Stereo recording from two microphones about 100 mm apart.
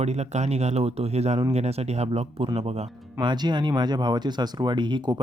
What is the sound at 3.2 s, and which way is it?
Speech, 50° right (ahead or behind).